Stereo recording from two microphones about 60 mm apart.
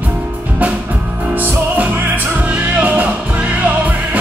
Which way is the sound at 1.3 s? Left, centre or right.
Right.